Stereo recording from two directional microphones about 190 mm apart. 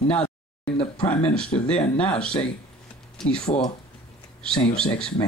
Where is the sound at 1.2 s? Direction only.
5° left (ahead or behind).